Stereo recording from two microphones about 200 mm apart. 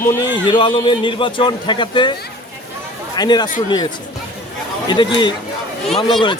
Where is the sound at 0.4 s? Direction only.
25° left (ahead or behind).